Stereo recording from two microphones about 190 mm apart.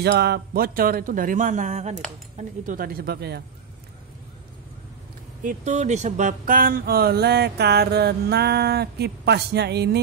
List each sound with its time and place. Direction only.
0.0 s speech: 55° right (ahead or behind)
5.4 s speech: 40° right (ahead or behind); by 9.8 s 60° right (ahead or behind)